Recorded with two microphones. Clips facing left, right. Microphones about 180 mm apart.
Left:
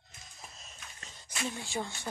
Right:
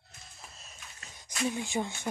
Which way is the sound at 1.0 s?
15° right (ahead or behind).